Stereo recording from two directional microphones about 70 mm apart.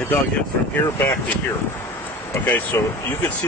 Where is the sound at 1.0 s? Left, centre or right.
Left.